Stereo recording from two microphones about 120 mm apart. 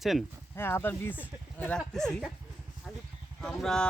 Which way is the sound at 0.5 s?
20° left (ahead or behind).